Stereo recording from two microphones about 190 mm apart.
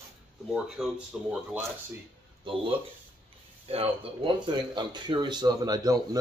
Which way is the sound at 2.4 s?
30° right (ahead or behind).